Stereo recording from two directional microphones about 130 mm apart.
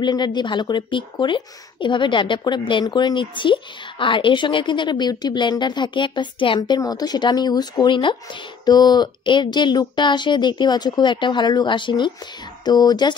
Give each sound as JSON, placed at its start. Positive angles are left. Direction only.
{"t": 0.0, "sound": "speech", "side_deg": 35}